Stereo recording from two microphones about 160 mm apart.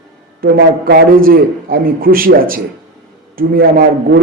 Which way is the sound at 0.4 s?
75° right (ahead or behind).